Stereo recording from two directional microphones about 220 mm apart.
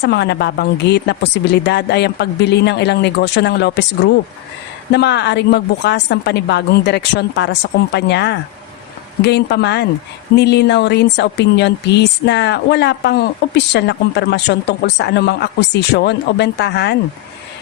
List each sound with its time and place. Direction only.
0.0 s speech: 50° left (ahead or behind)